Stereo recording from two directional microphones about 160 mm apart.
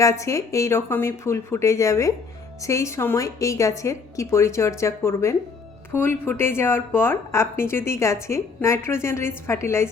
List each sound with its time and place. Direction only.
0.0 s a woman's voice: 20° left (ahead or behind)